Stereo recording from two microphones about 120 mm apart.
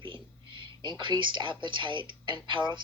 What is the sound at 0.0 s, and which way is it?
A woman's voice, 45° right (ahead or behind).